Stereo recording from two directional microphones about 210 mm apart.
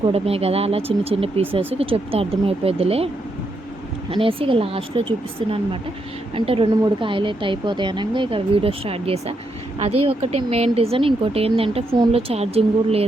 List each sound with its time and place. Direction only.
0.1 s a woman's voice: 30° right (ahead or behind)
4.1 s a woman's voice: 25° right (ahead or behind)